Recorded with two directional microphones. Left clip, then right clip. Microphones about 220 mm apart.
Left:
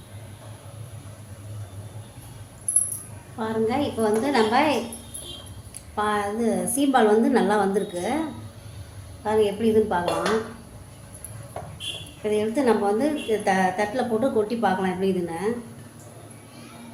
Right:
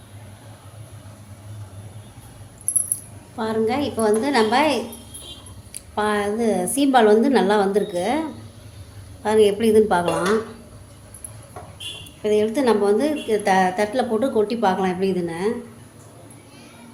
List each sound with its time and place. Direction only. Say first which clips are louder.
3.3 s a woman's voice: right 3 dB; 35° right (ahead or behind)
5.9 s a woman's voice: right 3 dB; 30° right (ahead or behind)
9.2 s a woman's voice: right 5 dB; 35° right (ahead or behind)
12.2 s a woman's voice: right 4 dB; 25° right (ahead or behind)